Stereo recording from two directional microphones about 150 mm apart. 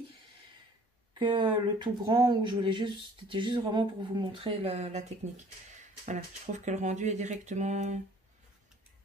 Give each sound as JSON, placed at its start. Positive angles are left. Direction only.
{"t": 1.1, "sound": "speech", "side_deg": -30}
{"t": 6.0, "sound": "speech", "side_deg": -50}